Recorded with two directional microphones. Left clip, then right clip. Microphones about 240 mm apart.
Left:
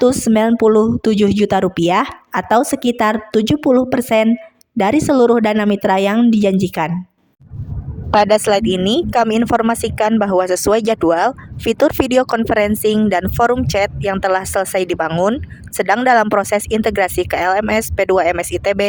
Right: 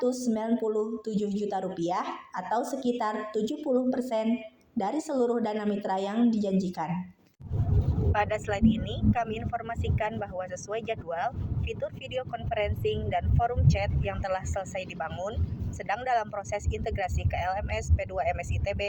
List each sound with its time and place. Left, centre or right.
0.0 s speech: left
8.1 s speech: left